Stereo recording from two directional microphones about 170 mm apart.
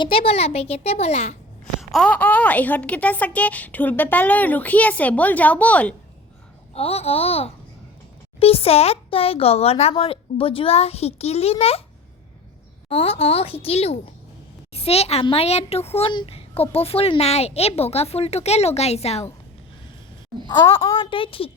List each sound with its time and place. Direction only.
0.0 s a child's voice: 35° left (ahead or behind)
1.8 s speech: centre (ahead or behind)
6.7 s a child's voice: 35° left (ahead or behind)
12.9 s a child's voice: 35° left (ahead or behind)
20.7 s a child's voice: 30° left (ahead or behind)